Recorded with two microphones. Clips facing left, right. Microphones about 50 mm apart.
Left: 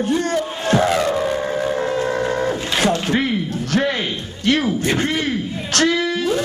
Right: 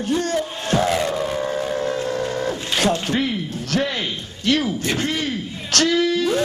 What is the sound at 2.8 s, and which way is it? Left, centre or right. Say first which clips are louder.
Zipper: left 1 dB; left.